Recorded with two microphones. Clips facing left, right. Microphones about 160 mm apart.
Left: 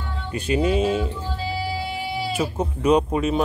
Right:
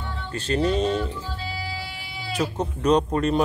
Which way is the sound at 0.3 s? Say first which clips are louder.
Left 2 dB; 10° left (ahead or behind).